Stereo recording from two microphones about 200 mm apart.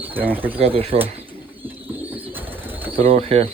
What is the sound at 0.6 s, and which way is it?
Speech, 30° right (ahead or behind).